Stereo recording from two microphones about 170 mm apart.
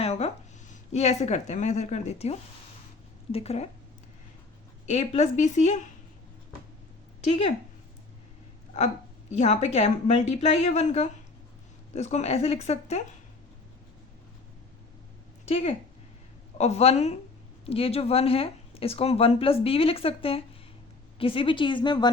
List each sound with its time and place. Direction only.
0.0 s a sound: 40° left (ahead or behind)
0.7 s speech: 40° left (ahead or behind)
4.9 s speech: 40° left (ahead or behind)
7.3 s speech: 35° left (ahead or behind)
9.3 s speech: 40° left (ahead or behind)
15.4 s a woman's voice: 35° left (ahead or behind)